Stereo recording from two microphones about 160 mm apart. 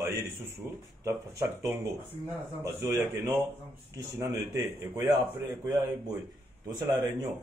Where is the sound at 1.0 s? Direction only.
20° right (ahead or behind).